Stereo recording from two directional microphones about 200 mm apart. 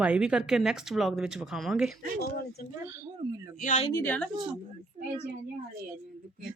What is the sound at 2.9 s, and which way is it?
Speech, 10° right (ahead or behind).